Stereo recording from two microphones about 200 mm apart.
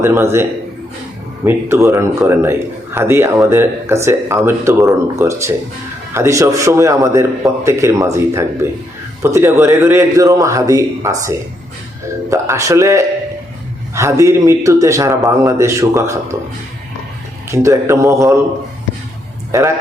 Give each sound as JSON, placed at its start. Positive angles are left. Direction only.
{"t": 0.0, "sound": "a man's voice", "side_deg": -10}
{"t": 1.5, "sound": "a man's voice", "side_deg": -10}
{"t": 12.3, "sound": "a man's voice", "side_deg": -15}
{"t": 17.5, "sound": "a man's voice", "side_deg": -15}
{"t": 19.5, "sound": "a man's voice", "side_deg": -15}